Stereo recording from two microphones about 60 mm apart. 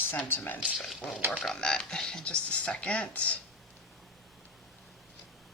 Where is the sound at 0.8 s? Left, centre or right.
Centre.